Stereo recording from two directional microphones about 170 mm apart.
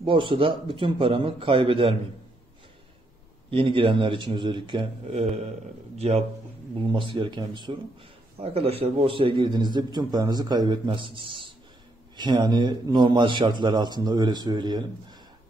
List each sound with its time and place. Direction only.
0.0 s a man's voice: 30° right (ahead or behind)
3.4 s a man's voice: 30° right (ahead or behind)